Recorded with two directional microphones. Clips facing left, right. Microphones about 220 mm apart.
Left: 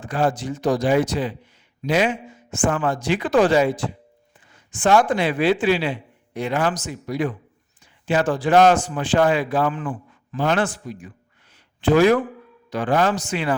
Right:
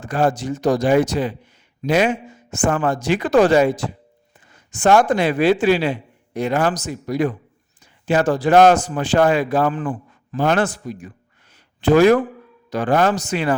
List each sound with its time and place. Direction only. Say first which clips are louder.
0.0 s a man's voice: right 3 dB; 45° right (ahead or behind)